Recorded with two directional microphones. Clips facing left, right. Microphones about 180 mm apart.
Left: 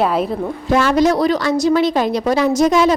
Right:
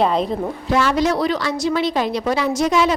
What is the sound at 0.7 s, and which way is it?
A woman's voice, 45° left (ahead or behind).